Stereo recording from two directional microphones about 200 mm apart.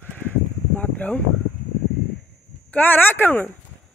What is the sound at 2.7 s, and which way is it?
Speech, 10° left (ahead or behind).